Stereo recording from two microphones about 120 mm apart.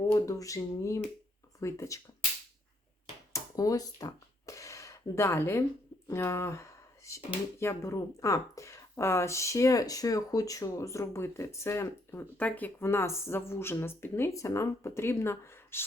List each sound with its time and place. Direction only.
0.1 s speech: 25° left (ahead or behind)
3.3 s speech: 30° left (ahead or behind)